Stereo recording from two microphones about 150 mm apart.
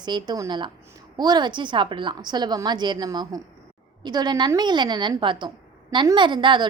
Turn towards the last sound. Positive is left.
turn(degrees=-30)  # may be behind; listen again after turning